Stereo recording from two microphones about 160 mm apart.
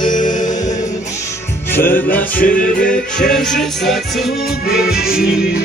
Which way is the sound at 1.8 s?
60° left (ahead or behind).